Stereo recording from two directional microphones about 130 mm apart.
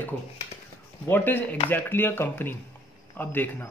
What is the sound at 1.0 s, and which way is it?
Speech, 15° left (ahead or behind).